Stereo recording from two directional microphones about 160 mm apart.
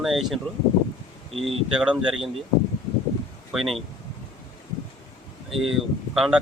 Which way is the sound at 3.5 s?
Centre (ahead or behind).